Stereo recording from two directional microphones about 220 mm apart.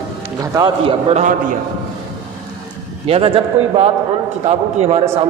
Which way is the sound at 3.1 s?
25° right (ahead or behind).